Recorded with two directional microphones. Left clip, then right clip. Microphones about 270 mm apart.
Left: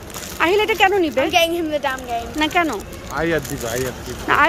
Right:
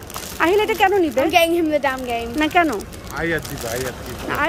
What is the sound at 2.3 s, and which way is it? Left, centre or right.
Speech, centre.